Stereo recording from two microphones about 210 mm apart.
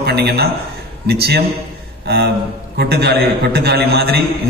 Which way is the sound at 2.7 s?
50° right (ahead or behind).